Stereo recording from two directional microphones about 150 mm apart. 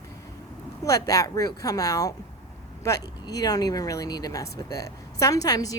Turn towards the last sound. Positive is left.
turn(degrees=25)  # may be behind; listen again after turning